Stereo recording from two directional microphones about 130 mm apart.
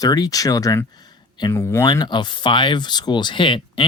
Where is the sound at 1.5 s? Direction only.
20° left (ahead or behind).